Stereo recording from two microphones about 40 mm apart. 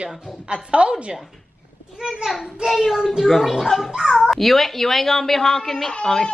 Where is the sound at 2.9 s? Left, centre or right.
Centre.